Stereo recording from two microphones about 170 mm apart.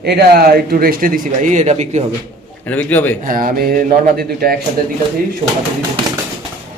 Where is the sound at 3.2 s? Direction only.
55° right (ahead or behind).